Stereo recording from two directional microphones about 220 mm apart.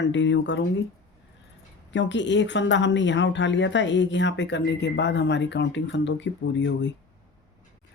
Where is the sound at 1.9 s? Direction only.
55° left (ahead or behind).